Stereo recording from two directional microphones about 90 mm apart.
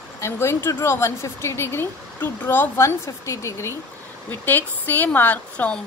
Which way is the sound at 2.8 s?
35° left (ahead or behind).